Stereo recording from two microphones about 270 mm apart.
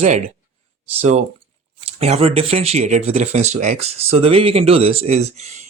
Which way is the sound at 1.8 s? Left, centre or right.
Right.